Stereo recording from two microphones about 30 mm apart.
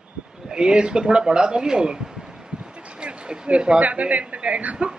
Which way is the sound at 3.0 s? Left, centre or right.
Right.